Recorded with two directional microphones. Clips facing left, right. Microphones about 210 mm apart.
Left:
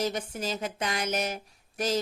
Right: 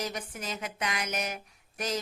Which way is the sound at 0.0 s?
30° left (ahead or behind).